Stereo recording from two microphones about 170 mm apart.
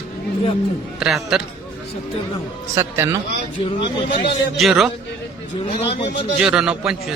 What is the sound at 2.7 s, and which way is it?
Speech, 15° right (ahead or behind).